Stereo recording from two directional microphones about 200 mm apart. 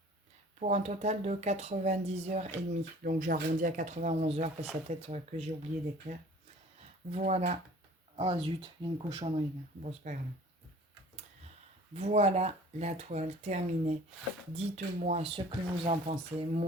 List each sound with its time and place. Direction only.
0.6 s speech: 35° right (ahead or behind)
3.0 s speech: 45° right (ahead or behind)
7.1 s speech: 35° right (ahead or behind)
11.9 s speech: 35° right (ahead or behind)